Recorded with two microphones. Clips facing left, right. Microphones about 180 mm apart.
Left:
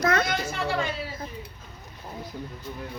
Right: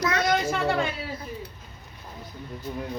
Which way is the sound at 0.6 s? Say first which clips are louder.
Right 3 dB; 55° right (ahead or behind).